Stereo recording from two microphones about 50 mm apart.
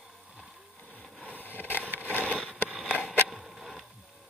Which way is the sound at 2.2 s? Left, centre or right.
Left.